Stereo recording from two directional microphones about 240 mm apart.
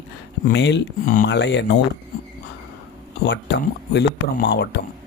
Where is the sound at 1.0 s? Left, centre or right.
Left.